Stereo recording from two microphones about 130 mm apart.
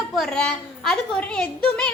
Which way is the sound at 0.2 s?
5° left (ahead or behind).